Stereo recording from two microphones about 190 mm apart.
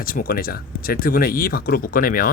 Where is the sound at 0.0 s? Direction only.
50° left (ahead or behind).